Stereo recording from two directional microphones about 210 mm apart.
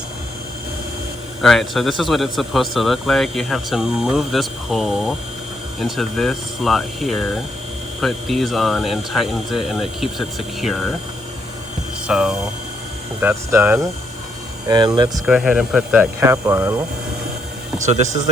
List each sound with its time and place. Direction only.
1.4 s a man's voice: centre (ahead or behind)
12.0 s a man's voice: 5° right (ahead or behind)
15.3 s speech: 5° right (ahead or behind)